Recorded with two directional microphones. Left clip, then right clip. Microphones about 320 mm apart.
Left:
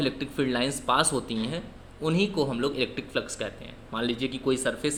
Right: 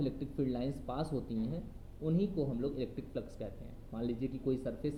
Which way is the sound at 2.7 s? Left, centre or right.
Left.